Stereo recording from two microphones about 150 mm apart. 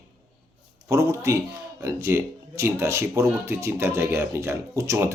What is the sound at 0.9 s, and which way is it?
Speech, 20° right (ahead or behind).